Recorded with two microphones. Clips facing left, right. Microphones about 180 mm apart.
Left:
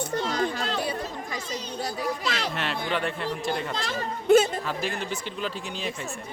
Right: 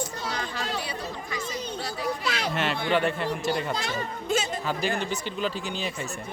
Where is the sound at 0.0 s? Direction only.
50° left (ahead or behind).